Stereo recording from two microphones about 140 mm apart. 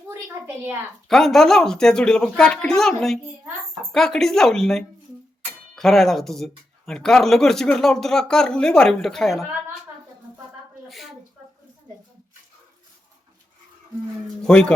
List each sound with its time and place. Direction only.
0.1 s a woman's voice: 15° right (ahead or behind)
1.0 s speech: centre (ahead or behind)
10.8 s a sound: centre (ahead or behind)
14.4 s speech: 5° left (ahead or behind)